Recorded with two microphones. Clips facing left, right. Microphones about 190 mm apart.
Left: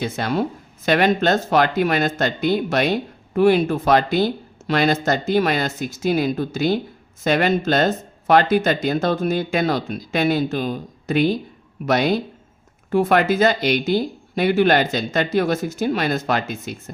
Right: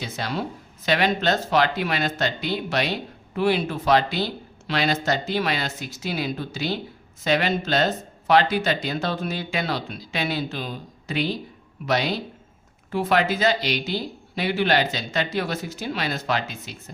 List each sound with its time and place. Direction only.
0.0 s speech: 50° left (ahead or behind)